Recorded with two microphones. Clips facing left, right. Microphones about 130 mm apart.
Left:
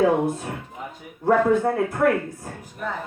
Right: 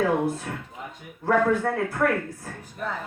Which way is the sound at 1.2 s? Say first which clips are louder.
Left 3 dB; 20° left (ahead or behind).